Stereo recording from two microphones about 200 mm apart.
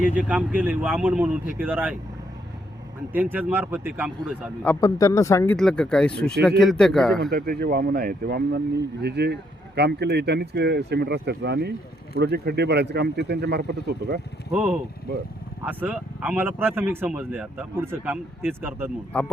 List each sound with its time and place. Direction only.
0.1 s speech: 5° right (ahead or behind)
3.1 s speech: 10° right (ahead or behind)
4.6 s speech: 15° left (ahead or behind)
5.5 s speech: 5° left (ahead or behind)
7.2 s speech: 50° right (ahead or behind)
14.5 s speech: 5° right (ahead or behind)
19.1 s speech: 5° left (ahead or behind)